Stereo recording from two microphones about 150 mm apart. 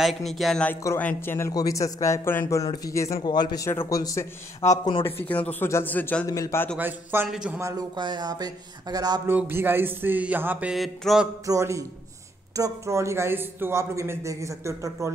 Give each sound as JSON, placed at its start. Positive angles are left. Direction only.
{"t": 0.0, "sound": "speech", "side_deg": 0}
{"t": 5.0, "sound": "speech", "side_deg": 10}
{"t": 6.8, "sound": "speech", "side_deg": -15}
{"t": 7.6, "sound": "speech", "side_deg": -25}
{"t": 9.3, "sound": "speech", "side_deg": -15}
{"t": 11.4, "sound": "speech", "side_deg": -20}